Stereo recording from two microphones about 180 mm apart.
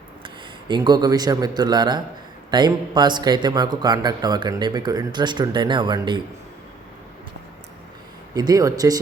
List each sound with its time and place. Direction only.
0.7 s a man's voice: 25° right (ahead or behind)
8.3 s a man's voice: 20° right (ahead or behind)